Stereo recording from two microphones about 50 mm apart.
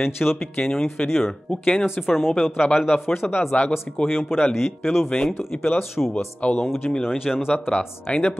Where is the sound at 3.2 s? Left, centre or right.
Centre.